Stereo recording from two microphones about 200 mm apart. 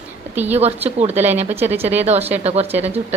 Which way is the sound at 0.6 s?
30° right (ahead or behind).